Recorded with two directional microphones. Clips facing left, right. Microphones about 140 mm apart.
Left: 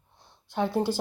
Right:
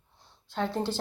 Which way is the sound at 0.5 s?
15° left (ahead or behind).